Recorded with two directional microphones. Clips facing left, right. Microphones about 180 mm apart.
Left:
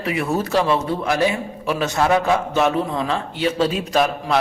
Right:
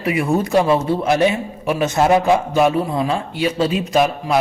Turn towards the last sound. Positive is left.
turn(degrees=-10)  # may be behind; listen again after turning